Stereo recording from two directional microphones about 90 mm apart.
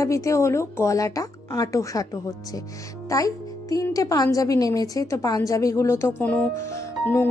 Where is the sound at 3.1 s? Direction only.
40° left (ahead or behind); by 6.5 s 20° left (ahead or behind).